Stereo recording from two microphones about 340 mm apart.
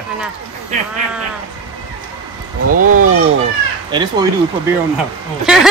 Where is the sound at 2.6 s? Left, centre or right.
Right.